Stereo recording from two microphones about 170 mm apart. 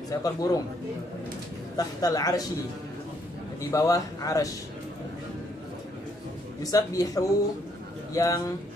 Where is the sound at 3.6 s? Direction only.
20° left (ahead or behind).